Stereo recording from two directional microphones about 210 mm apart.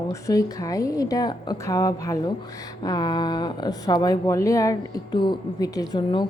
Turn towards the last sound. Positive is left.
turn(degrees=20)  # may be behind; listen again after turning